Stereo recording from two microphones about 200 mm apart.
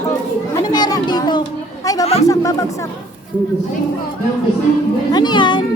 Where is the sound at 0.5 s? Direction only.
20° left (ahead or behind).